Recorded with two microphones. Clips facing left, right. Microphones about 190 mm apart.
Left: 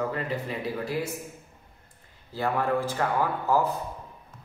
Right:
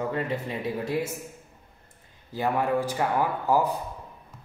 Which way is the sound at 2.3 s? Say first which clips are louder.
Right 1 dB; 15° right (ahead or behind).